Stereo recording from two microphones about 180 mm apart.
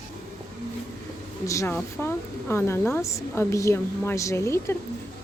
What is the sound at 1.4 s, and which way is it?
A woman's voice, 15° left (ahead or behind).